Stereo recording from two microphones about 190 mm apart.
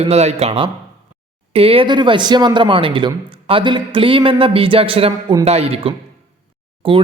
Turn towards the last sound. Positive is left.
turn(degrees=-30)  # may be behind; listen again after turning